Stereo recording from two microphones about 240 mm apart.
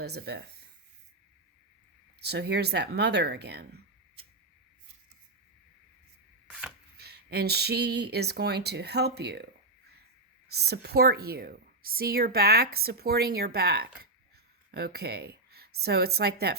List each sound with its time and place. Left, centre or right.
0.0 s speech: right
2.2 s speech: right
6.5 s chopping: centre
6.9 s speech: right
10.5 s a woman's voice: right